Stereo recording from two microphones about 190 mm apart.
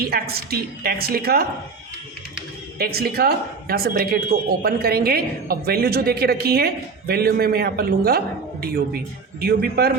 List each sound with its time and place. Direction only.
0.0 s a woman's voice: 55° right (ahead or behind)
2.7 s a woman's voice: 55° right (ahead or behind)
9.4 s a woman's voice: 55° right (ahead or behind)